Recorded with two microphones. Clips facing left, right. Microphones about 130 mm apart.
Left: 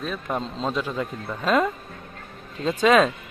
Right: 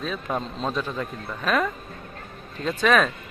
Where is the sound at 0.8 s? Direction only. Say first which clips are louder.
Left 2 dB; 10° left (ahead or behind).